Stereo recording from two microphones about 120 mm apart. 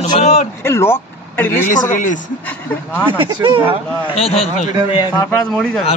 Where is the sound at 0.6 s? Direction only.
20° left (ahead or behind).